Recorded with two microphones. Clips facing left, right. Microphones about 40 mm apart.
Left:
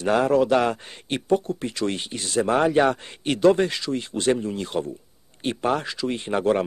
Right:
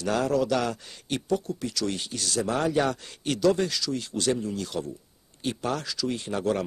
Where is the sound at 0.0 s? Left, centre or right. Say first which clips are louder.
Left 6 dB; left.